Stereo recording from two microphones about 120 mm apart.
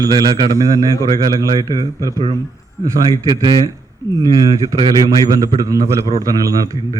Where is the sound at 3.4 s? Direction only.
45° right (ahead or behind).